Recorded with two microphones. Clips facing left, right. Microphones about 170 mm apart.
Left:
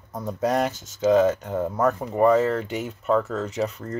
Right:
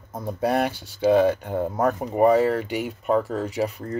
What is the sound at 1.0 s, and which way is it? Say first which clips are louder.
Speech: even; 30° right (ahead or behind).